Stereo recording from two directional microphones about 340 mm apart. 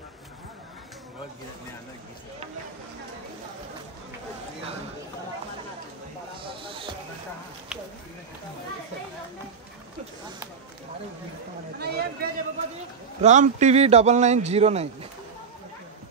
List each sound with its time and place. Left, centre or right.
6.4 s speech: centre
11.8 s speech: right